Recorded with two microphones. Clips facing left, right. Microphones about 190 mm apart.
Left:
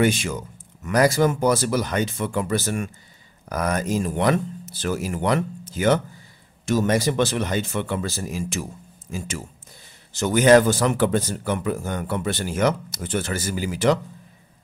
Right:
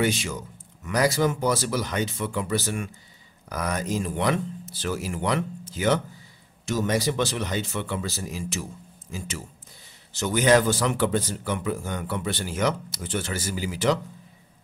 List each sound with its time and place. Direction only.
0.0 s a man's voice: 50° left (ahead or behind)
10.1 s a man's voice: 50° left (ahead or behind)